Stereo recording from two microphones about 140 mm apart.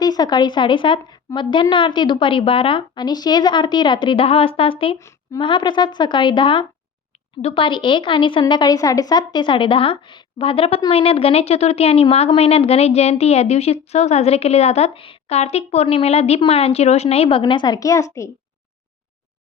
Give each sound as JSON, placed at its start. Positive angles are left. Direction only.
{"t": 0.0, "sound": "a woman's voice", "side_deg": 30}
{"t": 4.9, "sound": "speech", "side_deg": 20}
{"t": 5.4, "sound": "a woman's voice", "side_deg": 35}
{"t": 17.4, "sound": "a woman's voice", "side_deg": 30}